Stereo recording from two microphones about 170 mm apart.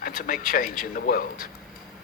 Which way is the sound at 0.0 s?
55° left (ahead or behind).